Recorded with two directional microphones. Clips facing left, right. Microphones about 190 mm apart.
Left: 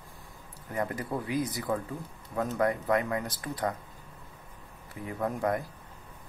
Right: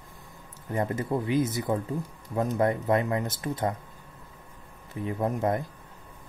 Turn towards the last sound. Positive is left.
turn(degrees=-25)  # may be behind; listen again after turning